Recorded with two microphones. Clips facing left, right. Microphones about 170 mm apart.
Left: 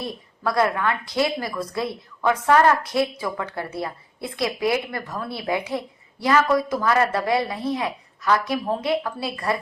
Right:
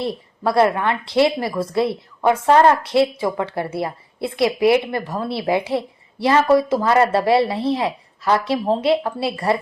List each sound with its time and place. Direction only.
0.1 s a woman's voice: 30° right (ahead or behind)